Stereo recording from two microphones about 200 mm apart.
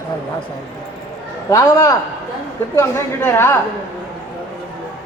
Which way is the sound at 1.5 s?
15° left (ahead or behind).